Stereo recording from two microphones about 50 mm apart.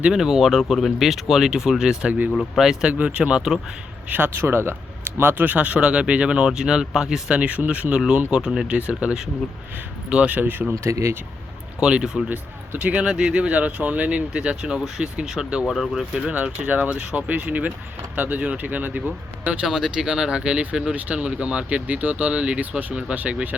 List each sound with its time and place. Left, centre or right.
0.1 s speech: centre
2.3 s speech: centre
2.8 s speech: right
4.1 s speech: right
5.2 s speech: right; by 7.2 s centre
7.3 s speech: right
8.6 s speech: right
10.8 s speech: right
11.8 s speech: centre
13.1 s speech: centre
14.5 s speech: centre
15.6 s speech: centre
16.1 s speech: right
19.6 s speech: centre; by 23.6 s right